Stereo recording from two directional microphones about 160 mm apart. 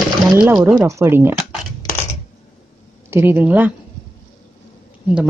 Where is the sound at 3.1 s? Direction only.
15° right (ahead or behind).